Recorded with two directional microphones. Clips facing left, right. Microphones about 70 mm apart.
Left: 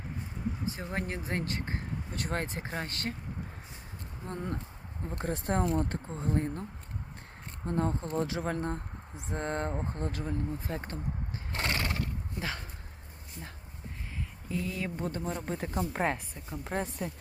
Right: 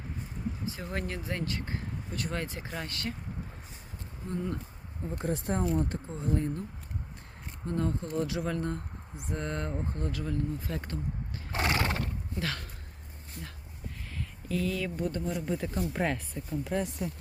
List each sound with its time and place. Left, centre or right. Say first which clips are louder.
0.6 s a sound: left 1 dB; left
0.9 s speech: right 1 dB; left
4.3 s speech: right 2 dB; left
11.5 s horse: right 3 dB; right
12.4 s speech: right 2 dB; left
14.5 s speech: right 3 dB; left
15.2 s speech: right 2 dB; left